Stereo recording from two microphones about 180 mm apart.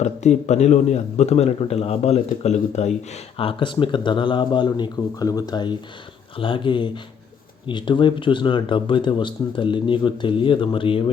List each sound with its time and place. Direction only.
0.0 s a man's voice: 40° left (ahead or behind)